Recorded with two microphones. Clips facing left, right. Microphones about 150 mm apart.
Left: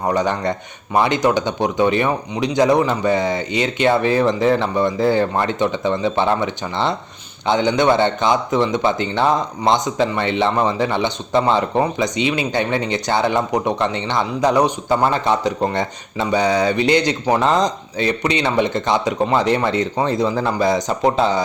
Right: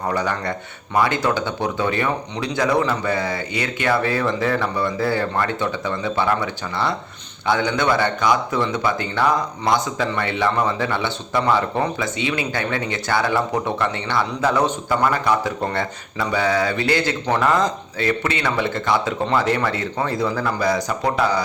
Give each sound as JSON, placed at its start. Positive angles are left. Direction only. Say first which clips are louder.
{"t": 0.1, "sound": "speech", "louder": "left 5 dB", "side_deg": 20}